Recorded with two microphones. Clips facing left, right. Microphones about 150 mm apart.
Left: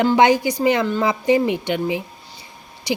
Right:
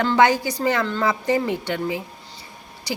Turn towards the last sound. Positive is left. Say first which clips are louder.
# left 5 dB
turn(degrees=15)  # may be behind; listen again after turning